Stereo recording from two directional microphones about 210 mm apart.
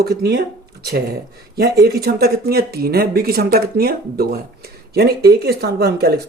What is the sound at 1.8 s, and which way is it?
Speech, 45° right (ahead or behind).